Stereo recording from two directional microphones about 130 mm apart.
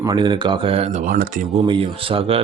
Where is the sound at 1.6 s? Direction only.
40° right (ahead or behind).